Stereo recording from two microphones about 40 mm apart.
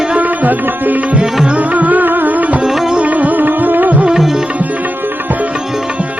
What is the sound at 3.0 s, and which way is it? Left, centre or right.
Music, right.